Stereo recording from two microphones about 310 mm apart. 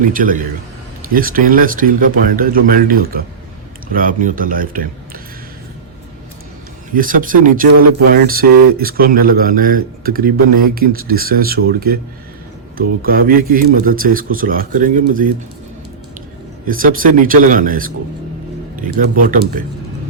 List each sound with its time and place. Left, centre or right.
0.0 s speech: right
6.9 s speech: right
16.6 s speech: right